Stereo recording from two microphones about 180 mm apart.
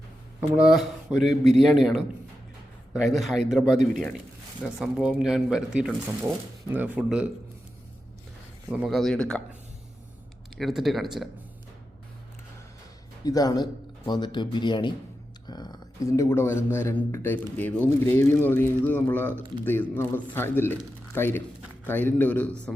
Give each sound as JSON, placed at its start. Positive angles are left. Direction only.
{"t": 0.3, "sound": "a man's voice", "side_deg": -5}
{"t": 8.7, "sound": "a man's voice", "side_deg": -5}
{"t": 13.2, "sound": "speech", "side_deg": 20}